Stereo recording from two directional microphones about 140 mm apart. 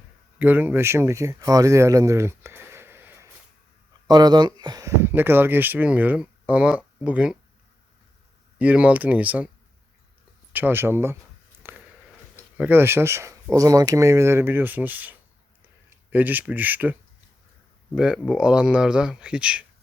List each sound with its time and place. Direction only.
0.3 s speech: 10° right (ahead or behind)
4.0 s speech: 30° right (ahead or behind); by 7.3 s 10° right (ahead or behind)
8.5 s speech: 10° right (ahead or behind)
10.5 s speech: 15° right (ahead or behind)
11.6 s a sound: 15° right (ahead or behind)
12.5 s speech: 15° right (ahead or behind)